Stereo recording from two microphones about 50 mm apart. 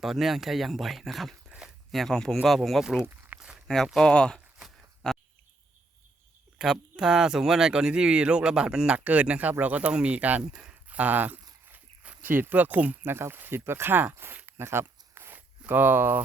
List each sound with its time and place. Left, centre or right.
0.0 s speech: centre
1.5 s a sound: centre
1.9 s speech: centre
3.3 s walk: right
3.7 s speech: centre
6.6 s speech: centre
9.0 s speech: right
13.1 s speech: right
14.4 s a sound: right
15.4 s speech: right